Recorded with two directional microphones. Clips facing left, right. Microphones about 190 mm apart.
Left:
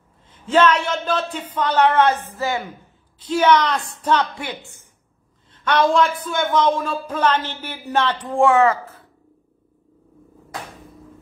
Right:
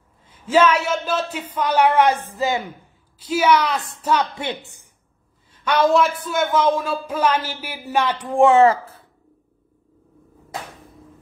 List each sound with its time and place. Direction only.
0.3 s speech: 10° right (ahead or behind)
5.5 s speech: 10° right (ahead or behind)
8.5 s speech: 25° right (ahead or behind)